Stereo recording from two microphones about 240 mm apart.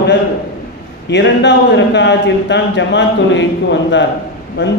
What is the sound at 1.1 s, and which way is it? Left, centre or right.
A man's voice, left.